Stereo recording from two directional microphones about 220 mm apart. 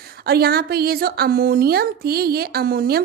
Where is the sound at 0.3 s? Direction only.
45° right (ahead or behind).